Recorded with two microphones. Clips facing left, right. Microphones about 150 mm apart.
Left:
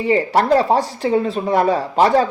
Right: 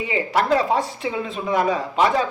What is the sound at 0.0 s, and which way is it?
Speech, 35° left (ahead or behind).